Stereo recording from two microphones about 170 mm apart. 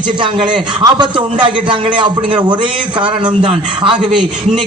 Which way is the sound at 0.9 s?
30° right (ahead or behind).